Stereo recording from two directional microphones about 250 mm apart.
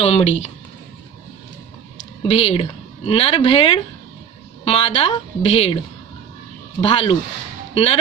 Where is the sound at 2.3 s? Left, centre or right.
Left.